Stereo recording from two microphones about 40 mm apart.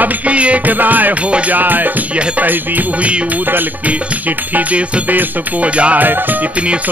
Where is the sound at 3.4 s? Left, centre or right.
Right.